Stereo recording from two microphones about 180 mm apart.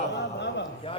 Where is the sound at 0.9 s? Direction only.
30° left (ahead or behind).